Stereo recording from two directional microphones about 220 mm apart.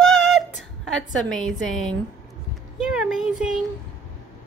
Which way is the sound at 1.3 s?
Centre (ahead or behind).